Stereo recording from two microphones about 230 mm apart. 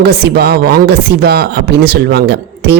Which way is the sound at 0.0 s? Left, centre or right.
Right.